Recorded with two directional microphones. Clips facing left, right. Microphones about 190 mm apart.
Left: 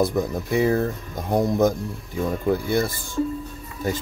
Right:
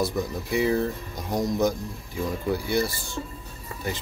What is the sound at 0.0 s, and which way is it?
Speech, 50° left (ahead or behind).